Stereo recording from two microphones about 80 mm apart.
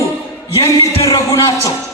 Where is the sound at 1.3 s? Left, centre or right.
Left.